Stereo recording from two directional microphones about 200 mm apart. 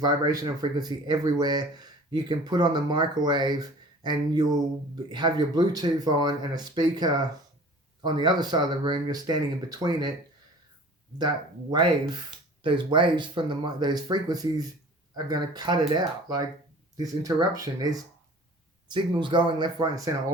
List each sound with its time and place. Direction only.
0.0 s speech: 20° right (ahead or behind)
11.7 s speech: 20° right (ahead or behind)